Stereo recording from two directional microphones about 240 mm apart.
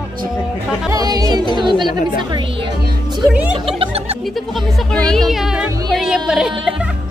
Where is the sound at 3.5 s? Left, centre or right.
Right.